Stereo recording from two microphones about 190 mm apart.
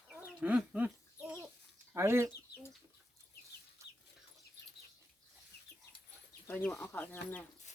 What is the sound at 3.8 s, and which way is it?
Chicken, 15° right (ahead or behind).